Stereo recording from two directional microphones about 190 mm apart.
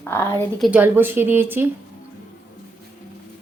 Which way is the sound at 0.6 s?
10° right (ahead or behind).